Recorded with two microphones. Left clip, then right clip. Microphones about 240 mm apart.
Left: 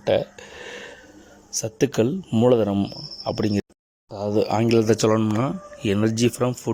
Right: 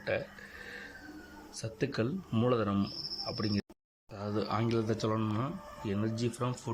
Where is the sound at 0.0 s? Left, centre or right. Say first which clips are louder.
Left 13 dB; left.